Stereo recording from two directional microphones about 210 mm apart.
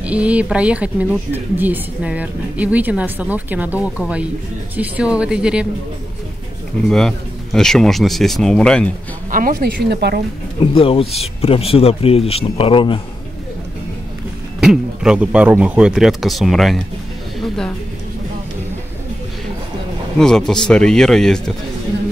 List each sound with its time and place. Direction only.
0.0 s a woman's voice: 5° right (ahead or behind)
6.9 s speech: centre (ahead or behind)
9.3 s speech: 45° right (ahead or behind)
10.6 s speech: 25° left (ahead or behind)
14.6 s speech: 5° right (ahead or behind)
17.4 s music: 5° left (ahead or behind)
20.2 s speech: centre (ahead or behind)